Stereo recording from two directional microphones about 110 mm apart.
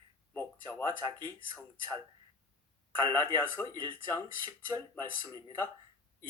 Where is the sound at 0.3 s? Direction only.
20° left (ahead or behind).